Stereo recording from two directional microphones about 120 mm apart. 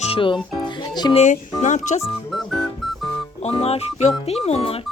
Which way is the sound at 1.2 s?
85° left.